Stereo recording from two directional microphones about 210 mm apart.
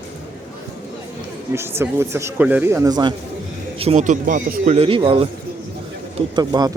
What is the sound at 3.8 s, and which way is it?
A man's voice, 30° right (ahead or behind).